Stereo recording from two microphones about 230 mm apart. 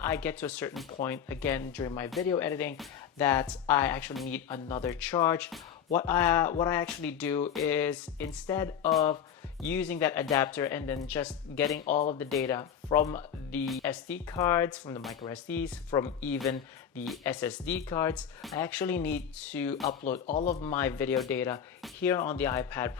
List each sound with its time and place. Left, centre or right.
0.0 s speech: centre
11.9 s speech: left
12.4 s speech: centre
20.3 s speech: left
20.7 s speech: centre